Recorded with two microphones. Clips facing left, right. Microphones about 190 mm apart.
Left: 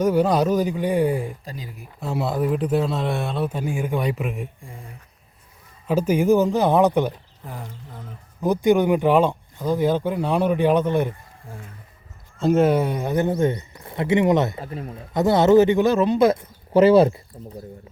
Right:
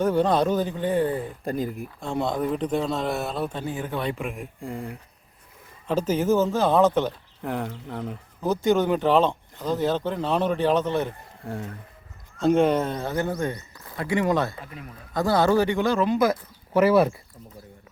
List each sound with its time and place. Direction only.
0.0 s speech: 10° left (ahead or behind)
1.5 s speech: 50° right (ahead or behind)
2.0 s speech: 5° left (ahead or behind)
3.5 s speech: 10° left (ahead or behind)
4.6 s speech: 70° right (ahead or behind)
5.9 s speech: 10° left (ahead or behind)
7.4 s speech: 70° right (ahead or behind)
8.4 s speech: 15° left (ahead or behind)
11.4 s speech: 70° right (ahead or behind)
12.4 s speech: 5° left (ahead or behind); by 14.6 s 20° left (ahead or behind)
14.6 s speech: 35° left (ahead or behind)
15.1 s speech: 20° left (ahead or behind)